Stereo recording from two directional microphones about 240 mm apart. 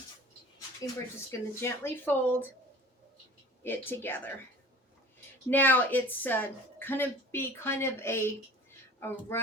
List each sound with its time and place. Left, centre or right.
1.3 s a woman's voice: centre
3.6 s a woman's voice: centre
5.5 s a woman's voice: centre